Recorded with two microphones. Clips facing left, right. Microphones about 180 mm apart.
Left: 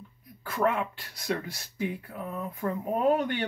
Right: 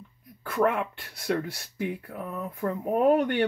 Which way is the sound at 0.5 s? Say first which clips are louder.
Right 2 dB; 60° right (ahead or behind).